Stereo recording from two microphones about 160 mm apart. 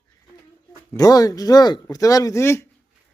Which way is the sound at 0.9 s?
20° left (ahead or behind).